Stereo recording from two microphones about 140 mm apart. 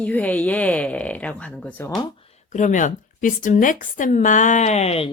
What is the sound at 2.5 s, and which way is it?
Speech, 60° left (ahead or behind).